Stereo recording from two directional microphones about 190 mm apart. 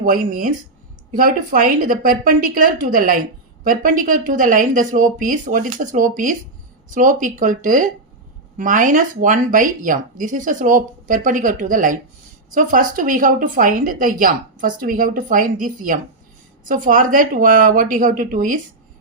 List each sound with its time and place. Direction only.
0.0 s a woman's voice: 45° right (ahead or behind)